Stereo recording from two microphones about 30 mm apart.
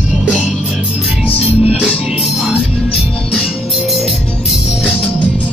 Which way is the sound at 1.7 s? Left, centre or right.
Centre.